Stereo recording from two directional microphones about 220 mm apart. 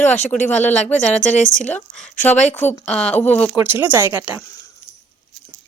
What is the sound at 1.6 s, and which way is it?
A woman's voice, 5° left (ahead or behind).